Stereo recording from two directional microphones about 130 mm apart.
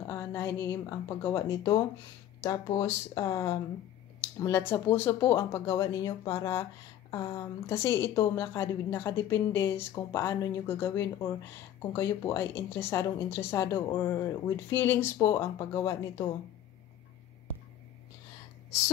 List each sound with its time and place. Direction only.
0.0 s a woman's voice: 20° left (ahead or behind)